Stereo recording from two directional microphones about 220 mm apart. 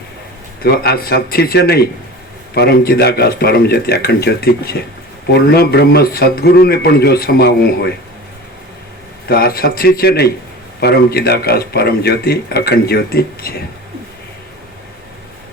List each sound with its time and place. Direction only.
0.6 s speech: 45° left (ahead or behind)
9.3 s speech: 45° left (ahead or behind)